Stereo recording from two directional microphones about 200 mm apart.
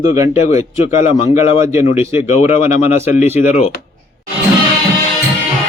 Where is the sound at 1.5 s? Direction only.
15° right (ahead or behind).